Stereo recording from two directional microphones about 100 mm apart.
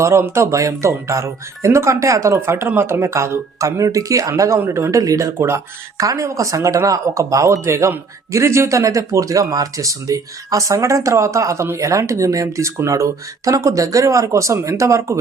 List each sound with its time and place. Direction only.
0.0 s speech: 25° right (ahead or behind)